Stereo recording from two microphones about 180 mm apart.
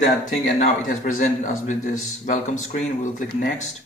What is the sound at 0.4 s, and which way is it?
A man's voice, 50° left (ahead or behind).